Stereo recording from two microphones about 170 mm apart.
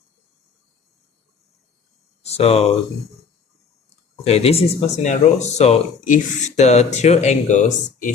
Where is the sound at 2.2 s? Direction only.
35° left (ahead or behind).